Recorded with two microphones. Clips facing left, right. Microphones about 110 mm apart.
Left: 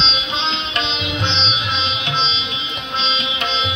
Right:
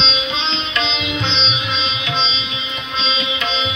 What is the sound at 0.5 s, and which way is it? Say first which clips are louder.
Sitar: right 1 dB; 55° left (ahead or behind).